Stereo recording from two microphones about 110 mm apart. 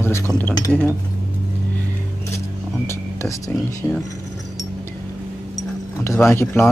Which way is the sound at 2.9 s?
25° left (ahead or behind).